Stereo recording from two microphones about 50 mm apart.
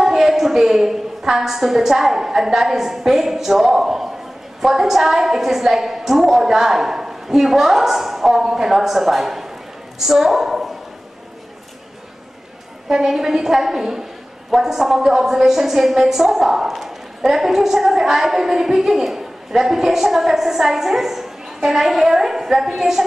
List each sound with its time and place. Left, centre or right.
0.0 s a woman's voice: centre
12.8 s a woman's voice: centre